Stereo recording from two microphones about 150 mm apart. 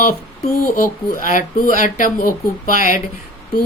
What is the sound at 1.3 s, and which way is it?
Speech, 65° left (ahead or behind).